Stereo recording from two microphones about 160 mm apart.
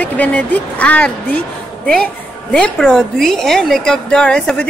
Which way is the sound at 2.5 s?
5° left (ahead or behind).